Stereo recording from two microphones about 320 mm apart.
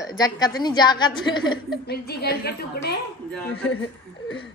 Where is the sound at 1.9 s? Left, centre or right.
Left.